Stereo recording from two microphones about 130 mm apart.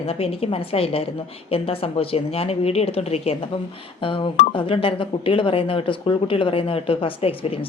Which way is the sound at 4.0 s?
40° left (ahead or behind).